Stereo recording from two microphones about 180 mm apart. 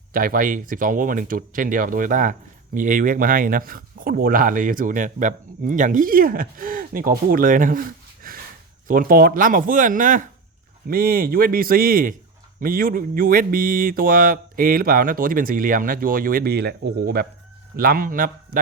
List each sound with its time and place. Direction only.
0.1 s speech: 50° right (ahead or behind)